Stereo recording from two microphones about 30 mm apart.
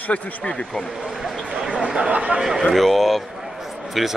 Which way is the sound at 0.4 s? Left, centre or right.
Left.